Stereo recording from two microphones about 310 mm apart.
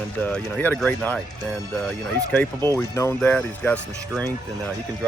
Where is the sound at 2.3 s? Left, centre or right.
Centre.